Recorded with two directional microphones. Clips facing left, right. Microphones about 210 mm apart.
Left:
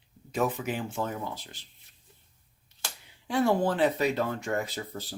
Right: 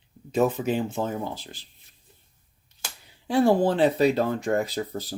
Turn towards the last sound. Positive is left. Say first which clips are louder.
# right 7 dB
turn(degrees=-40)  # may be behind; listen again after turning